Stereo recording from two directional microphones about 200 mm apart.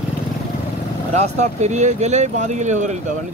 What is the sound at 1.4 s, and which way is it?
Speech, 35° right (ahead or behind).